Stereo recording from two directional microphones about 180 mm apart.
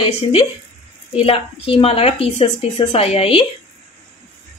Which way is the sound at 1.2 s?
30° left (ahead or behind).